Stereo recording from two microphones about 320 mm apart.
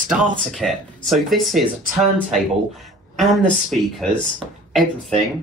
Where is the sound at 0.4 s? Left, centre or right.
Centre.